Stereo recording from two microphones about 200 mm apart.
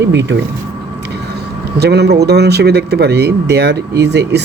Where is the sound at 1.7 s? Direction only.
55° right (ahead or behind).